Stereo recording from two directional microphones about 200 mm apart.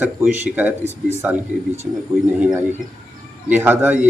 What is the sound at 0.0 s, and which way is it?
Speech, 5° right (ahead or behind).